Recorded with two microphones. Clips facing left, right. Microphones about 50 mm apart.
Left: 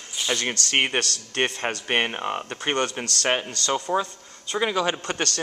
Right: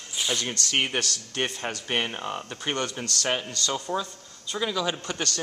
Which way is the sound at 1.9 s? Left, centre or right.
Left.